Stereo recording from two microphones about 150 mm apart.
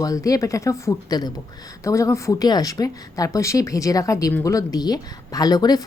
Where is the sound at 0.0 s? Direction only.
25° left (ahead or behind).